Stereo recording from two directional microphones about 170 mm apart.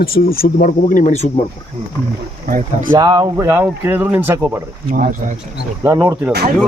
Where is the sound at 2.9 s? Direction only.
25° right (ahead or behind).